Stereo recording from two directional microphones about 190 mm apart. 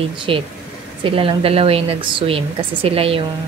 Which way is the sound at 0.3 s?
30° right (ahead or behind).